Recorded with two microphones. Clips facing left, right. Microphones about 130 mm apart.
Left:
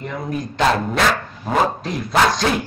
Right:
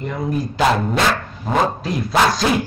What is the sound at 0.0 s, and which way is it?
A man's voice, centre (ahead or behind).